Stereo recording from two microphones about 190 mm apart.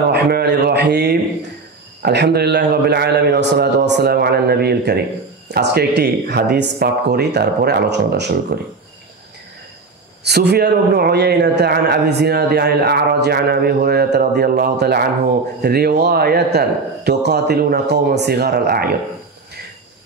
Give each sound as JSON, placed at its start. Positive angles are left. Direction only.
{"t": 0.1, "sound": "a man's voice", "side_deg": -60}
{"t": 10.2, "sound": "a man's voice", "side_deg": -60}